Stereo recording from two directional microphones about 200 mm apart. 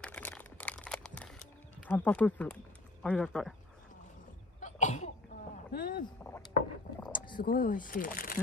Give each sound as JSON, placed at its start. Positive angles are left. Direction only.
{"t": 0.0, "sound": "crumpling", "side_deg": 5}
{"t": 1.9, "sound": "speech", "side_deg": 5}
{"t": 4.6, "sound": "cough", "side_deg": 35}
{"t": 5.7, "sound": "speech", "side_deg": 45}
{"t": 7.1, "sound": "a sound", "side_deg": 25}
{"t": 7.3, "sound": "speech", "side_deg": 45}